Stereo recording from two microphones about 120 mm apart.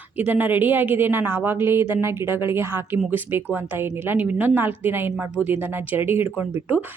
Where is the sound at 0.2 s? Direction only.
15° right (ahead or behind).